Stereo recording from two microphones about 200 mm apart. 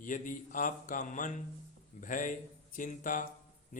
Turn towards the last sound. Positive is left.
turn(degrees=40)  # may be behind; listen again after turning